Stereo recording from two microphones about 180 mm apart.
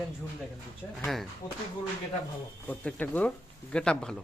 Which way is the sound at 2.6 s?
10° left (ahead or behind).